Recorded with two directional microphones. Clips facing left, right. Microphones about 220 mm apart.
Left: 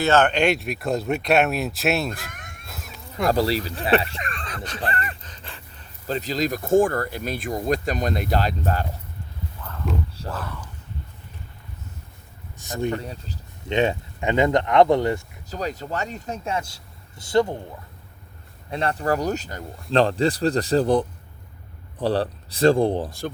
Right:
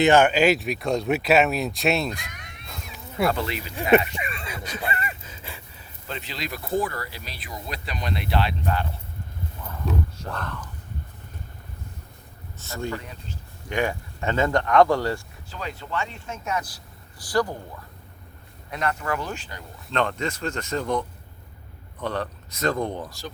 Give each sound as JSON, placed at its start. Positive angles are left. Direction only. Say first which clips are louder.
{"t": 0.0, "sound": "speech", "louder": "right 2 dB", "side_deg": -10}
{"t": 2.0, "sound": "a sound", "louder": "left 1 dB", "side_deg": 50}
{"t": 2.6, "sound": "a sound", "louder": "even", "side_deg": 5}
{"t": 3.2, "sound": "speech", "louder": "left 6 dB", "side_deg": 35}
{"t": 4.1, "sound": "a sound", "louder": "even", "side_deg": -10}
{"t": 6.1, "sound": "speech", "louder": "left 9 dB", "side_deg": 40}
{"t": 9.6, "sound": "a sound", "louder": "even", "side_deg": -10}
{"t": 10.2, "sound": "speech", "louder": "left 1 dB", "side_deg": 5}
{"t": 12.5, "sound": "speech", "louder": "left 5 dB", "side_deg": 15}
{"t": 13.0, "sound": "speech", "louder": "left 5 dB", "side_deg": 35}
{"t": 13.7, "sound": "speech", "louder": "left 4 dB", "side_deg": 25}
{"t": 15.4, "sound": "speech", "louder": "left 6 dB", "side_deg": 40}
{"t": 18.7, "sound": "speech", "louder": "left 4 dB", "side_deg": 30}
{"t": 19.9, "sound": "speech", "louder": "left 7 dB", "side_deg": 30}